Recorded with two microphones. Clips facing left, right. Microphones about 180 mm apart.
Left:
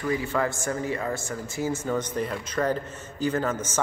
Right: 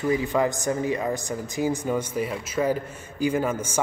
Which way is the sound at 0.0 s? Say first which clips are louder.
Right 3 dB; 20° right (ahead or behind).